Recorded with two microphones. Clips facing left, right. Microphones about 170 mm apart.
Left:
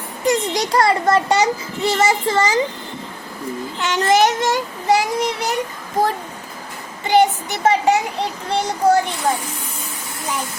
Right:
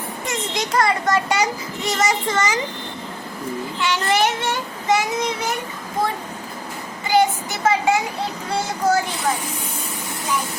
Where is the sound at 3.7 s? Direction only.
45° left (ahead or behind).